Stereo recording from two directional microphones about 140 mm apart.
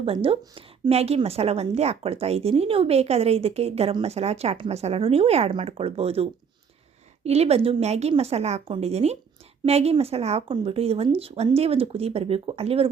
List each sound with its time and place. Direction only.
0.0 s a woman's voice: 45° right (ahead or behind)
7.3 s a woman's voice: 45° right (ahead or behind)